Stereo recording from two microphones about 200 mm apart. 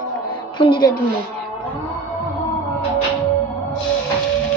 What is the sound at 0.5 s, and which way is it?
Speech, 25° left (ahead or behind).